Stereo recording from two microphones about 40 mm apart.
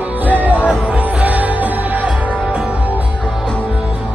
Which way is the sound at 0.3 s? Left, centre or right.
Right.